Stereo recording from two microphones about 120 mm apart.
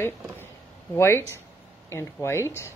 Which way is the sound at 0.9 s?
20° left (ahead or behind).